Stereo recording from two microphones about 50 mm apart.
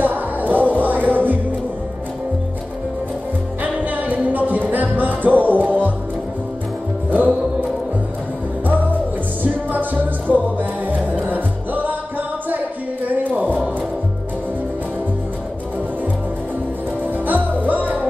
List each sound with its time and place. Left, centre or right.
0.0 s music: right
3.6 s music: right
7.1 s music: right
9.4 s music: right
12.4 s a sound: right
17.3 s music: right